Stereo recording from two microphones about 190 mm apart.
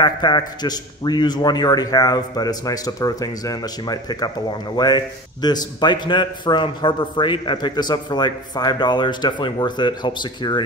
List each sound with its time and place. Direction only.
0.0 s a man's voice: 20° left (ahead or behind)